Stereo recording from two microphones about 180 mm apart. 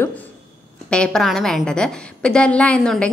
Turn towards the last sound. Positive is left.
turn(degrees=5)  # may be behind; listen again after turning